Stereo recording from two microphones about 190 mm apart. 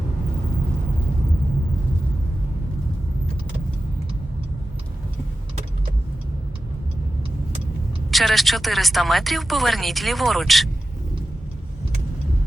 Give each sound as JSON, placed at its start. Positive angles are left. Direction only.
{"t": 8.1, "sound": "speech", "side_deg": 0}